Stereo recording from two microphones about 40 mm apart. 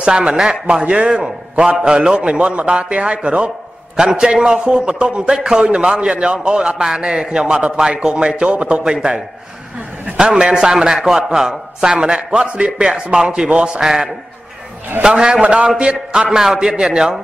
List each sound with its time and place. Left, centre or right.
0.0 s a man's voice: right
8.5 s a man's voice: right
8.8 s a man's voice: right
10.2 s a man's voice: right
13.3 s a man's voice: right
13.7 s a man's voice: centre
15.0 s a man's voice: centre